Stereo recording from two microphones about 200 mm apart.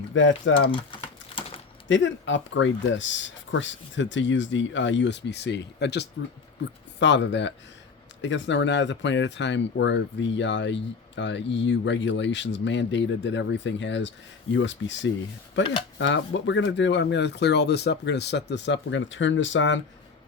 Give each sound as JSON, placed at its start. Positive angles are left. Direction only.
{"t": 0.1, "sound": "speech", "side_deg": 70}
{"t": 0.7, "sound": "speech", "side_deg": 25}
{"t": 1.4, "sound": "a sound", "side_deg": 30}
{"t": 1.9, "sound": "speech", "side_deg": 70}